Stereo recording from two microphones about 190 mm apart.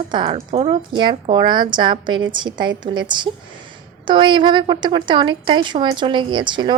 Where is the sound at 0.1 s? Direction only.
25° right (ahead or behind).